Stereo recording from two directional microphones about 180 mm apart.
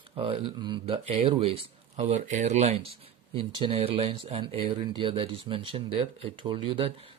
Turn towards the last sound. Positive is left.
turn(degrees=-30)  # may be behind; listen again after turning